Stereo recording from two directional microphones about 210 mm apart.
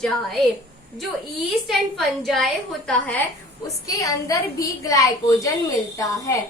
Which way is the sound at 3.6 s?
15° left (ahead or behind).